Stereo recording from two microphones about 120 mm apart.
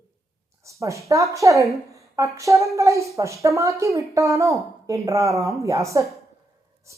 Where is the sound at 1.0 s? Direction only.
25° right (ahead or behind).